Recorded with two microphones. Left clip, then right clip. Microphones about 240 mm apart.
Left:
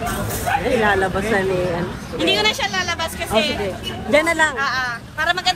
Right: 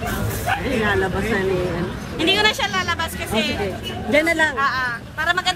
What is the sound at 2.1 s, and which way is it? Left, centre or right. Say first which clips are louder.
Speech: even; right.